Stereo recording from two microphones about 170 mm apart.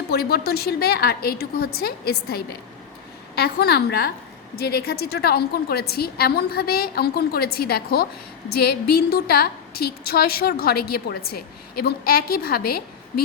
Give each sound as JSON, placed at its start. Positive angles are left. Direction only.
{"t": 0.1, "sound": "a woman's voice", "side_deg": 65}